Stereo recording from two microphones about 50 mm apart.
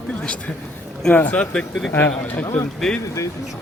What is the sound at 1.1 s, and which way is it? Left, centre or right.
A man's voice, left.